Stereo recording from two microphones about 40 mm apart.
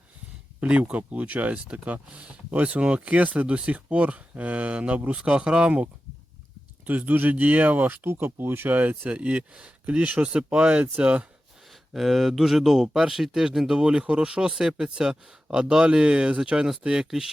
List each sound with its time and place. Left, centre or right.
0.6 s speech: right
3.0 s speech: right
5.2 s speech: right
6.8 s speech: right
8.0 s speech: right
8.7 s speech: right
11.9 s speech: centre